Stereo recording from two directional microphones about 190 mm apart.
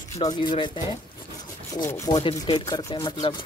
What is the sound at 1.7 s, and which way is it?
Rub, 15° left (ahead or behind).